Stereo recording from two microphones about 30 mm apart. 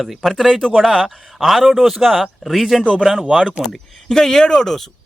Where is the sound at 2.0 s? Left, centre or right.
Centre.